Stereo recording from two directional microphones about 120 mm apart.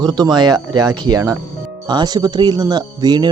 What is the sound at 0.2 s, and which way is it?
Speech, 35° right (ahead or behind).